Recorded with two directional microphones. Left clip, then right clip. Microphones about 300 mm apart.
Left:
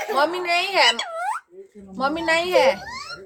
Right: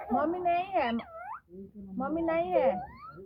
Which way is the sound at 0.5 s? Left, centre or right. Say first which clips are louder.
Left 11 dB; centre.